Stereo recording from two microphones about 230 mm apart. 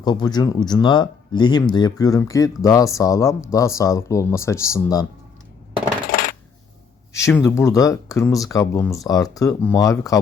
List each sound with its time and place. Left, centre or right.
0.0 s speech: centre
6.1 s coin: left
7.1 s speech: centre